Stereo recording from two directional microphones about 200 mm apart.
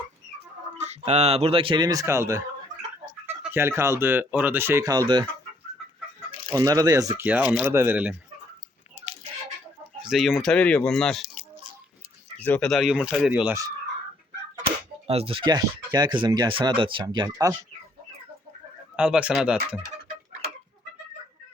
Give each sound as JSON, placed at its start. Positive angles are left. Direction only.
{"t": 0.8, "sound": "speech", "side_deg": -35}
{"t": 6.5, "sound": "speech", "side_deg": -20}
{"t": 10.0, "sound": "speech", "side_deg": 0}
{"t": 15.0, "sound": "speech", "side_deg": -30}
{"t": 18.9, "sound": "speech", "side_deg": -5}